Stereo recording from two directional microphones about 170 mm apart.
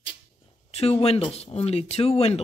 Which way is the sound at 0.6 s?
40° left (ahead or behind).